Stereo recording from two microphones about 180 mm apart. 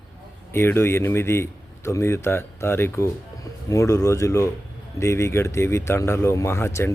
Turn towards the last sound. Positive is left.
turn(degrees=15)  # may be behind; listen again after turning